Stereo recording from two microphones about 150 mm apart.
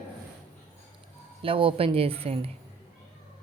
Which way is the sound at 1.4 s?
35° right (ahead or behind).